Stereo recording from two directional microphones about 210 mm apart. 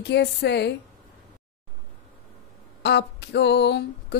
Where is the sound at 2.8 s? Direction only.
55° left (ahead or behind).